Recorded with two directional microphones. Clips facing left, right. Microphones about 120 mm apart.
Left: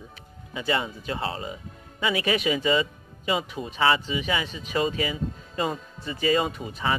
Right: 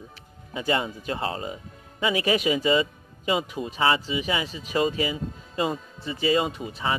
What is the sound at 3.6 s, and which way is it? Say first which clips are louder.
Speech: left 1 dB; 30° right (ahead or behind).